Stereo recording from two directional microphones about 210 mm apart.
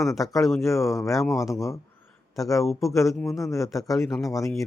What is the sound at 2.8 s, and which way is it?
A man's voice, 15° left (ahead or behind).